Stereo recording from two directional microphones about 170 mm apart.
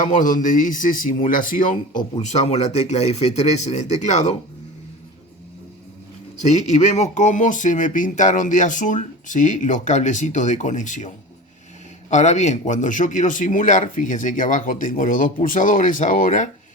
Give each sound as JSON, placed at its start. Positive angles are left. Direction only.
{"t": 0.0, "sound": "speech", "side_deg": 50}
{"t": 2.3, "sound": "speech", "side_deg": 40}
{"t": 6.4, "sound": "speech", "side_deg": 40}
{"t": 12.1, "sound": "speech", "side_deg": 45}